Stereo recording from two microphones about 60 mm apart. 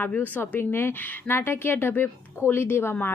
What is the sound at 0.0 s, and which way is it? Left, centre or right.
Speech, left.